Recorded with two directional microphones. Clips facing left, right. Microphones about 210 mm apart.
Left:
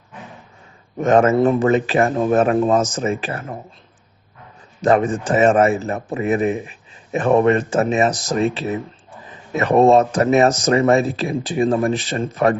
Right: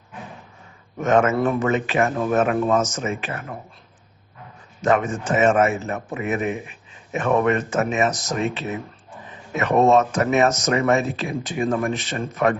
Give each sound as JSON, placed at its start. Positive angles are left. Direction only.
{"t": 0.9, "sound": "speech", "side_deg": 35}
{"t": 4.8, "sound": "speech", "side_deg": 35}